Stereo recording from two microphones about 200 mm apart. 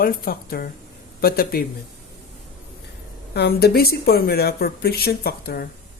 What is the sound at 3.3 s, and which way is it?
Speech, 55° left (ahead or behind).